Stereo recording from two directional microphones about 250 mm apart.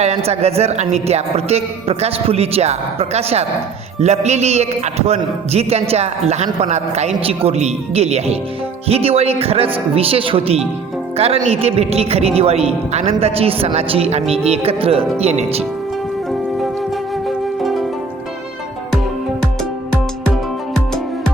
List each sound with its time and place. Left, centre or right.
0.0 s speech: right
17.2 s music: centre